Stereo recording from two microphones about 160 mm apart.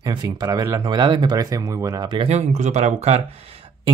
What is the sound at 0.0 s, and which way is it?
Speech, 25° right (ahead or behind).